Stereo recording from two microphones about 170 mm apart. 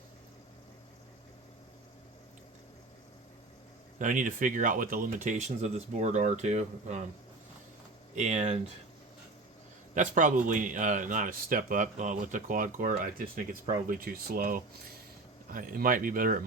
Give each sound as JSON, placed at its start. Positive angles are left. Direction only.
{"t": 3.9, "sound": "speech", "side_deg": -50}
{"t": 8.1, "sound": "speech", "side_deg": -45}
{"t": 9.9, "sound": "speech", "side_deg": -50}